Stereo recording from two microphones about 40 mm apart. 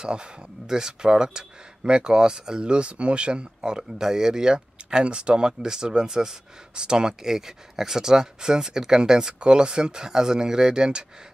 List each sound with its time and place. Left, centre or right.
0.7 s speech: centre